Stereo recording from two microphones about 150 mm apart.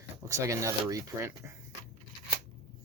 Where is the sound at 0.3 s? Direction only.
20° right (ahead or behind).